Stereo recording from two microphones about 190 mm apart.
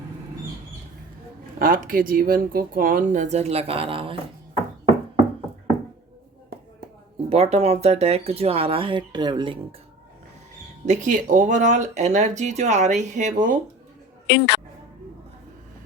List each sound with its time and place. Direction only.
1.5 s speech: 45° right (ahead or behind); by 4.2 s 30° right (ahead or behind)
7.3 s speech: 35° right (ahead or behind)
10.8 s speech: 40° right (ahead or behind)
14.3 s speech: 60° left (ahead or behind)